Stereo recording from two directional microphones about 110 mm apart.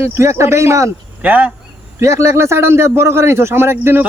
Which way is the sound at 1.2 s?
15° right (ahead or behind).